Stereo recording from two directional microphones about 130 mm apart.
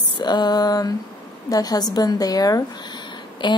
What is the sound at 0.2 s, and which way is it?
A woman's voice, 35° left (ahead or behind).